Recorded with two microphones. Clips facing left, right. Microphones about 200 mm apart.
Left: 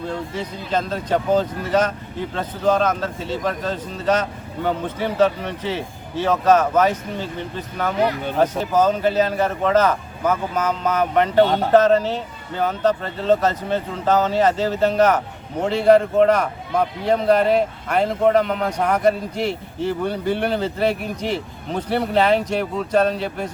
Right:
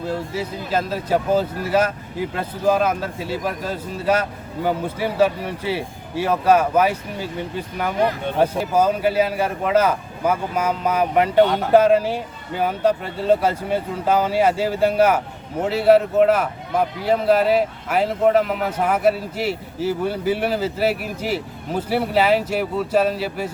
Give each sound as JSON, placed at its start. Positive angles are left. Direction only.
{"t": 0.0, "sound": "speech", "side_deg": -5}
{"t": 11.4, "sound": "speech", "side_deg": 30}
{"t": 11.7, "sound": "a man's voice", "side_deg": -10}